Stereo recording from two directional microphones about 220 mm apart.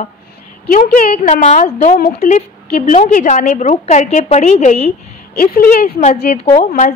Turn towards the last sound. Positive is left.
turn(degrees=35)  # may be behind; listen again after turning